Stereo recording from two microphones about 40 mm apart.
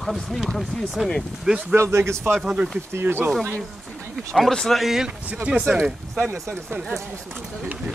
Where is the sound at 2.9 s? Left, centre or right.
Right.